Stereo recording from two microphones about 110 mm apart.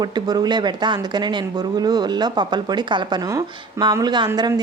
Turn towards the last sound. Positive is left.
turn(degrees=-40)  # may be behind; listen again after turning